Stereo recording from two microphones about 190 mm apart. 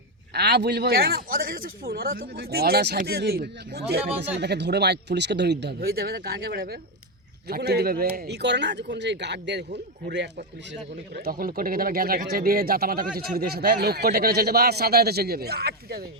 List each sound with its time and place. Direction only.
0.3 s speech: 60° right (ahead or behind)